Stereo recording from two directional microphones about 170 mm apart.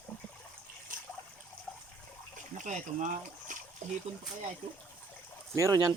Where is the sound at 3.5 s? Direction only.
50° right (ahead or behind).